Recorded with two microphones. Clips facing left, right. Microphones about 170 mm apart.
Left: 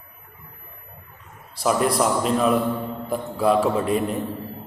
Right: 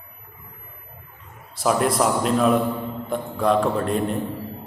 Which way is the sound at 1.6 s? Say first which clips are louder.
Even; centre (ahead or behind).